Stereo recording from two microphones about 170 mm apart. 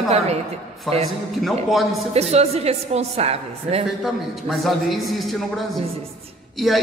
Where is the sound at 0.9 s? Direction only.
Centre (ahead or behind).